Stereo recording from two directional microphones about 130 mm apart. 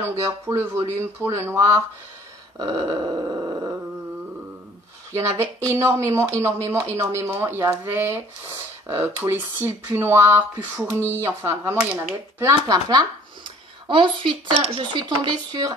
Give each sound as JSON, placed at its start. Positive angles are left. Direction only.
{"t": 0.0, "sound": "a woman's voice", "side_deg": -25}
{"t": 5.1, "sound": "a woman's voice", "side_deg": -20}
{"t": 13.8, "sound": "speech", "side_deg": -40}